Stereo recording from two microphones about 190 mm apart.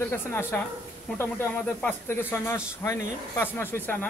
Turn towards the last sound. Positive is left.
turn(degrees=10)  # may be behind; listen again after turning